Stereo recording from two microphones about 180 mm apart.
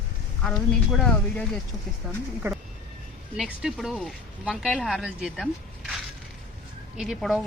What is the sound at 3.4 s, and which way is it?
Speech, centre (ahead or behind).